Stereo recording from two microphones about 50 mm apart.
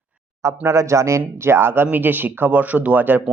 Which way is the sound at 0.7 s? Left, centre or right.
Right.